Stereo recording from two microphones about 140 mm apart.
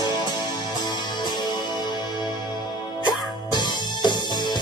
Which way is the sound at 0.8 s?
30° left (ahead or behind).